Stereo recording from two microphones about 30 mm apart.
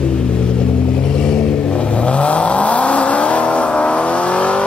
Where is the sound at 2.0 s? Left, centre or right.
Left.